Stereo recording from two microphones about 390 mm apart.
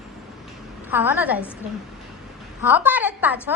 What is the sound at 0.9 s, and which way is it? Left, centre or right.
Speech, centre.